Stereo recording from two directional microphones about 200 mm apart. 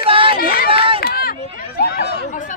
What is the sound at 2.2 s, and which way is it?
Speech, 40° left (ahead or behind).